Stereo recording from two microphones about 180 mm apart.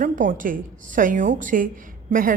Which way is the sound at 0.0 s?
50° right (ahead or behind).